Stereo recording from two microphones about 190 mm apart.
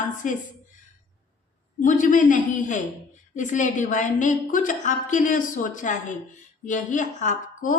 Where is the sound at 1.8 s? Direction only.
45° left (ahead or behind).